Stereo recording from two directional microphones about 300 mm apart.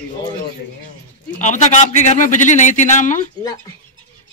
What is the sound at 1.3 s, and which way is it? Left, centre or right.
Speech, left.